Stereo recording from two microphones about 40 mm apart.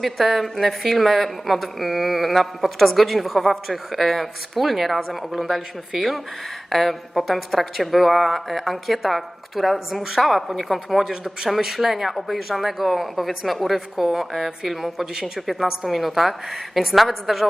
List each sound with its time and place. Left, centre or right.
0.0 s speech: centre
6.7 s speech: centre